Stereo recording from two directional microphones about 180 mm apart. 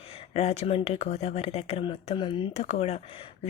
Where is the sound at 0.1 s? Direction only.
35° left (ahead or behind).